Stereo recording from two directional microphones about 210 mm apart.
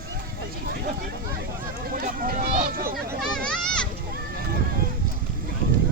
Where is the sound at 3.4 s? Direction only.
5° left (ahead or behind).